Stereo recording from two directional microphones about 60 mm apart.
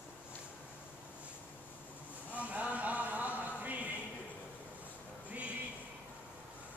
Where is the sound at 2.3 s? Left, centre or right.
Right.